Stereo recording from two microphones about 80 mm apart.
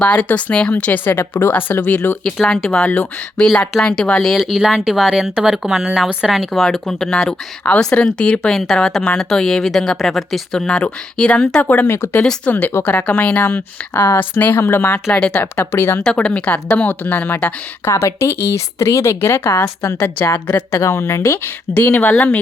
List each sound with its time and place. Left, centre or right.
0.0 s speech: centre
2.2 s speech: centre
3.4 s speech: centre
4.4 s speech: centre
11.7 s speech: left
15.1 s speech: centre
16.0 s speech: centre
17.8 s speech: left